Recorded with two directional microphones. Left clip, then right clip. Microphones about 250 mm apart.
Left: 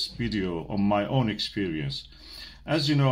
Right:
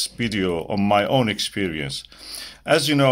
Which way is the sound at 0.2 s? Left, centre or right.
Right.